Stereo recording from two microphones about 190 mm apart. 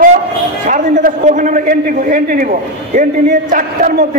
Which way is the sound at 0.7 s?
45° right (ahead or behind).